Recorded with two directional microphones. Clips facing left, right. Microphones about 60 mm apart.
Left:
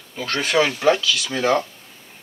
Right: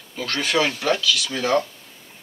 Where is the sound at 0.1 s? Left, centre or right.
Left.